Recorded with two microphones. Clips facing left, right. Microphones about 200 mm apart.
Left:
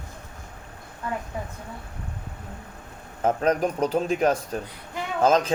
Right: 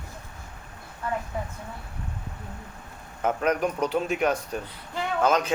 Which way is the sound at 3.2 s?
30° left (ahead or behind).